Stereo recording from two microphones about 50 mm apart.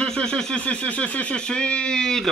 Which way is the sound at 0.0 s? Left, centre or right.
Centre.